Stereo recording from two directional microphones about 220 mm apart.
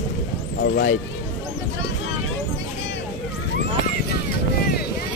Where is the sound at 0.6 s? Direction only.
45° left (ahead or behind).